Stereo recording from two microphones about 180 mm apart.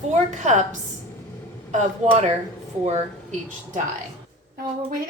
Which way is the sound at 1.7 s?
40° right (ahead or behind).